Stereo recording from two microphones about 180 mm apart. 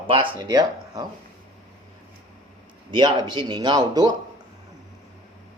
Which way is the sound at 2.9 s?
25° right (ahead or behind).